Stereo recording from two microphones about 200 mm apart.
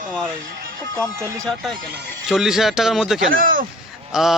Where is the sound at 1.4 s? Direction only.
Centre (ahead or behind).